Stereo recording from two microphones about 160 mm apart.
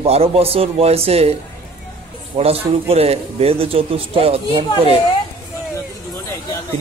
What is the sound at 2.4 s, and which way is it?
A man's voice, 40° right (ahead or behind).